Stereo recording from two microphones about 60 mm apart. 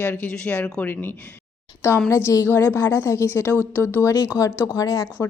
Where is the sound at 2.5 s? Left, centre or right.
Left.